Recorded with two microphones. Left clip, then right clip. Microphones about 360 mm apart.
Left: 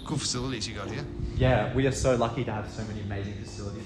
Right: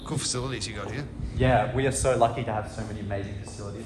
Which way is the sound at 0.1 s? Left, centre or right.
Centre.